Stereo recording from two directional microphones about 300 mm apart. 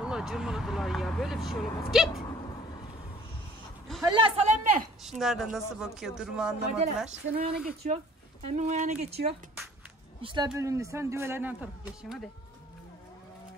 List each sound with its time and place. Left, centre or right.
0.0 s speech: centre
4.0 s speech: centre
5.2 s speech: centre
7.1 s speech: right
10.2 s speech: centre